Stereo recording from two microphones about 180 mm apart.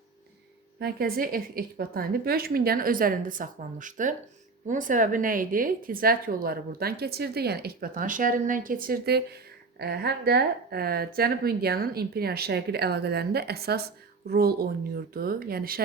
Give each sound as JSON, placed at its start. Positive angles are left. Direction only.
{"t": 0.8, "sound": "speech", "side_deg": -60}